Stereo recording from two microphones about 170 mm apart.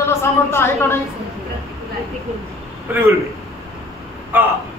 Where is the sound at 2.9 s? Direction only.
10° right (ahead or behind).